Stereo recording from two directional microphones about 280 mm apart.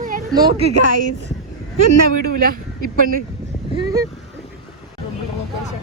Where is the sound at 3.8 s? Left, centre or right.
Centre.